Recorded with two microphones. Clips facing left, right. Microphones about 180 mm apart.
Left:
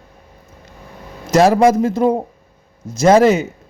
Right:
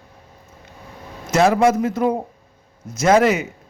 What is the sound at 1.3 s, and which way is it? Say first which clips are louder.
A man's voice: left 4 dB; 35° left (ahead or behind).